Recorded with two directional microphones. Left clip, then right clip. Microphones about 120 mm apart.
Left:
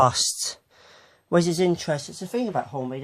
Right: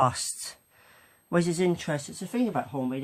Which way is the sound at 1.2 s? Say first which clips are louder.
Left 5 dB; 55° left (ahead or behind).